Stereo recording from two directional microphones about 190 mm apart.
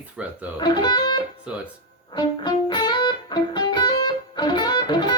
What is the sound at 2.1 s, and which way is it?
Music, 25° left (ahead or behind).